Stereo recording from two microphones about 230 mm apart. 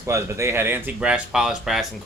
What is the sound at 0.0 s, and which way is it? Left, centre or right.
Speech, centre.